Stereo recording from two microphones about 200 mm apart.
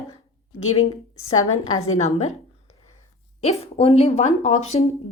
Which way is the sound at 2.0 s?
35° left (ahead or behind).